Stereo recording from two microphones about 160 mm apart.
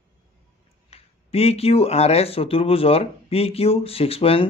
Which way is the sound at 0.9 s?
40° left (ahead or behind).